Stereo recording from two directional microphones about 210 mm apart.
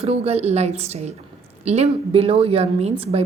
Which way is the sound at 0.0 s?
30° right (ahead or behind).